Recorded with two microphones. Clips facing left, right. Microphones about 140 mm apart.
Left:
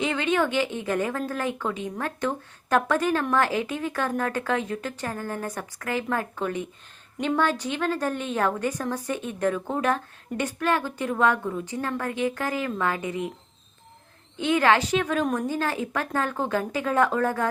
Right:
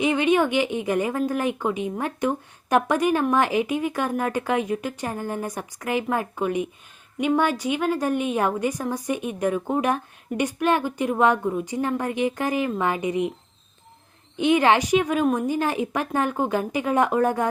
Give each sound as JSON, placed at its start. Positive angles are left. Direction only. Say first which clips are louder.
{"t": 0.0, "sound": "a woman's voice", "louder": "right 4 dB", "side_deg": -15}
{"t": 14.3, "sound": "a woman's voice", "louder": "right 3 dB", "side_deg": -20}